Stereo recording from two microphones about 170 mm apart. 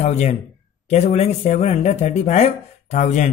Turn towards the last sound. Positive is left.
turn(degrees=45)  # may be behind; listen again after turning